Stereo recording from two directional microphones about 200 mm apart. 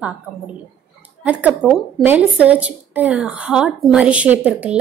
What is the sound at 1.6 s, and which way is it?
A woman's voice, 5° right (ahead or behind).